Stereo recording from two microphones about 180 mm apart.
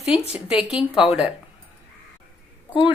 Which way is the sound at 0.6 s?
5° right (ahead or behind).